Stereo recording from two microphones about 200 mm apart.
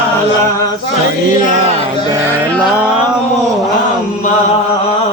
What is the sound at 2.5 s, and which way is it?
Music, 5° right (ahead or behind).